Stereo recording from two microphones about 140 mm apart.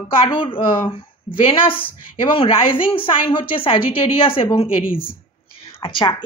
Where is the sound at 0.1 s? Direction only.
40° left (ahead or behind).